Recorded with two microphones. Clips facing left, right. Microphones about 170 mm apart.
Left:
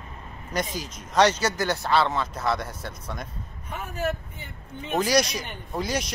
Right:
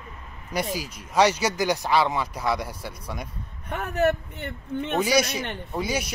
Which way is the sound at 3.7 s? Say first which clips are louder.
Right 6 dB; 65° right (ahead or behind).